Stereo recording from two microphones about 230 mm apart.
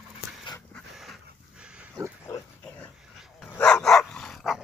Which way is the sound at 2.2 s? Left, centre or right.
Centre.